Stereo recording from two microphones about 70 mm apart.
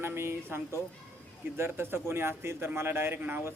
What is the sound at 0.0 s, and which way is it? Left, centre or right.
A man's voice, right.